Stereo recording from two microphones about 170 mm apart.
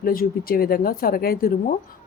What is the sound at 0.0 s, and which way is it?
Speech, 60° left (ahead or behind).